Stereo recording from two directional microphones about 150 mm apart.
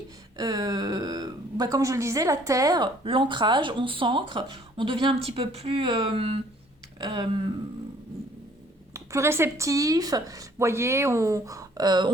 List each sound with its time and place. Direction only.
0.3 s a woman's voice: 25° right (ahead or behind)
8.9 s speech: 20° right (ahead or behind)